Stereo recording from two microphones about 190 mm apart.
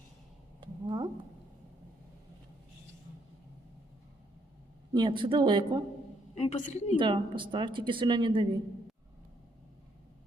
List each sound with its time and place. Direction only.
0.6 s a sound: 25° right (ahead or behind)
4.9 s speech: 25° right (ahead or behind)
6.3 s a woman's voice: 35° left (ahead or behind)
7.0 s speech: 25° right (ahead or behind)